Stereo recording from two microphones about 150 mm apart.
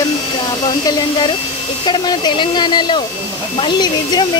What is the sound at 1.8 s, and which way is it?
Speech, 30° left (ahead or behind).